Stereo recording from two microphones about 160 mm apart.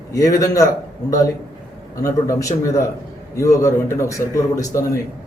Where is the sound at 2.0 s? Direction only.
20° left (ahead or behind).